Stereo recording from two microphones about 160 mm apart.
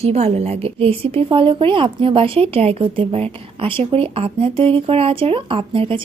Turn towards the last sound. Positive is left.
turn(degrees=-35)  # may be behind; listen again after turning